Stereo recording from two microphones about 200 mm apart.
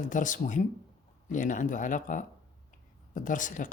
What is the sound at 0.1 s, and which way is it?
Speech, 40° left (ahead or behind).